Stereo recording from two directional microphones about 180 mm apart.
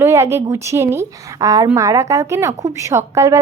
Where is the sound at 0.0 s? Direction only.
15° right (ahead or behind).